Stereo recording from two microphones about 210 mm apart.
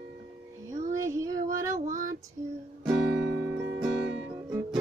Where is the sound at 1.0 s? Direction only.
15° right (ahead or behind).